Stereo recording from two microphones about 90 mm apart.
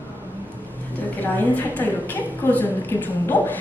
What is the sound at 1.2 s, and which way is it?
A woman's voice, 20° left (ahead or behind).